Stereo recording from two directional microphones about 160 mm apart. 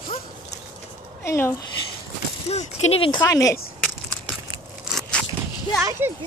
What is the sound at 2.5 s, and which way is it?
Speech, 45° left (ahead or behind).